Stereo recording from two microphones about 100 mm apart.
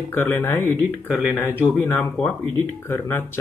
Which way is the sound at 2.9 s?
20° left (ahead or behind).